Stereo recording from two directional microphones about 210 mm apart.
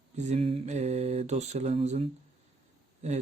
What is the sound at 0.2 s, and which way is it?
A man's voice, 30° right (ahead or behind).